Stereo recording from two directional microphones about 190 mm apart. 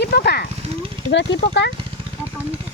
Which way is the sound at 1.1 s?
70° left (ahead or behind).